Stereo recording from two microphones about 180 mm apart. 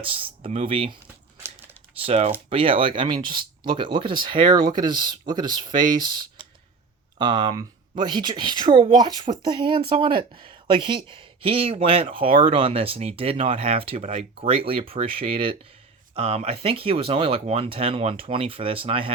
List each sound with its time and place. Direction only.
0.0 s speech: 30° right (ahead or behind)
2.0 s speech: 35° right (ahead or behind)